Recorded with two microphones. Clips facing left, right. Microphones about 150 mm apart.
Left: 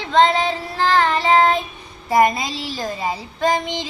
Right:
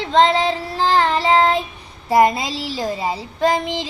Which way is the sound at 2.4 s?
35° right (ahead or behind).